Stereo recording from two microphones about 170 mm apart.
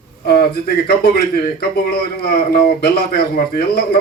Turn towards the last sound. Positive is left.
turn(degrees=70)  # may be behind; listen again after turning